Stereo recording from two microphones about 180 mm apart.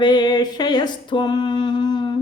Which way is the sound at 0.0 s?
25° left (ahead or behind).